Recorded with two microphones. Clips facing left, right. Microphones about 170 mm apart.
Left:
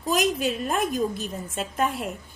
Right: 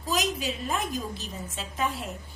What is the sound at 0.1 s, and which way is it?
A woman's voice, 55° left (ahead or behind).